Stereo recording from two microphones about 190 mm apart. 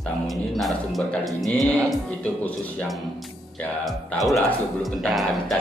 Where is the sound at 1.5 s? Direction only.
20° right (ahead or behind).